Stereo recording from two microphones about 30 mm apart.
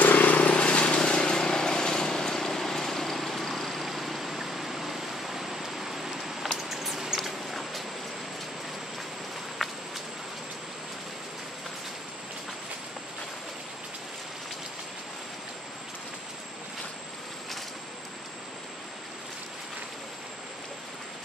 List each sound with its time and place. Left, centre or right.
0.0 s vehicle: left
0.4 s vehicle: left; by 3.8 s centre
3.8 s vehicle: centre
6.7 s a sound: centre
9.6 s walk: centre